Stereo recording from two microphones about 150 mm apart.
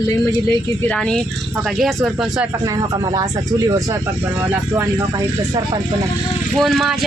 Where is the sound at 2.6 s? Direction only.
25° right (ahead or behind).